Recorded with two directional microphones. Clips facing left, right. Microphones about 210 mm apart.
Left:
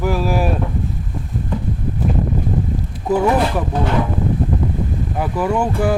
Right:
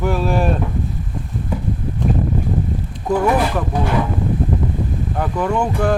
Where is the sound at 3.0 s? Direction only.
5° left (ahead or behind).